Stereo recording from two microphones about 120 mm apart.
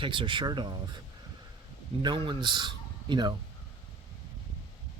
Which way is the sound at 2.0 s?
40° right (ahead or behind).